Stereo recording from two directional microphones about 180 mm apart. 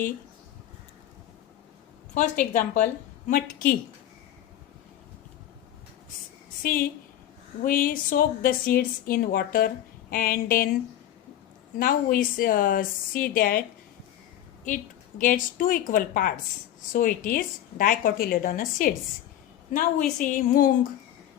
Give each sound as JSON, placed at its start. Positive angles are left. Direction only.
{"t": 2.1, "sound": "a woman's voice", "side_deg": 45}
{"t": 6.6, "sound": "a woman's voice", "side_deg": 50}
{"t": 11.8, "sound": "a woman's voice", "side_deg": 50}
{"t": 15.2, "sound": "a woman's voice", "side_deg": 50}
{"t": 20.1, "sound": "a woman's voice", "side_deg": 50}